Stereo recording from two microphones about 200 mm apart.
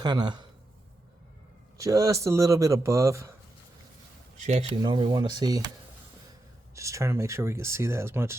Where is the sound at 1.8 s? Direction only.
15° right (ahead or behind).